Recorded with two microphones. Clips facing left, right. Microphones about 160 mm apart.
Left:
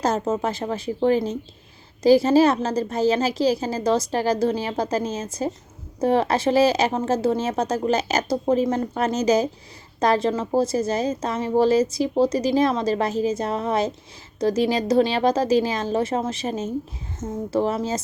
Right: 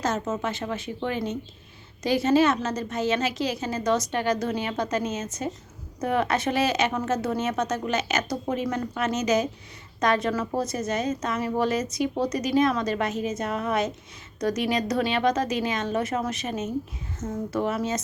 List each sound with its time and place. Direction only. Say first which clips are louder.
0.0 s a woman's voice: left 5 dB; 35° left (ahead or behind)